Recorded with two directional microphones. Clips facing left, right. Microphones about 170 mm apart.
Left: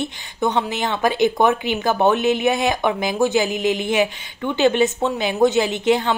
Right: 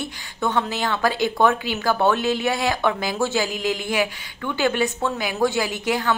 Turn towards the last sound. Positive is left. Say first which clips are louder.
# left 5 dB
turn(degrees=25)  # may be behind; listen again after turning